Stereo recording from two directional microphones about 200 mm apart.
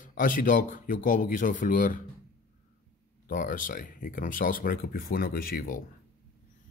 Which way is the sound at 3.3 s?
40° left (ahead or behind).